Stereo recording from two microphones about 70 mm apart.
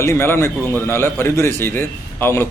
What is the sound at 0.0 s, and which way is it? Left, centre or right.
A man's voice, left.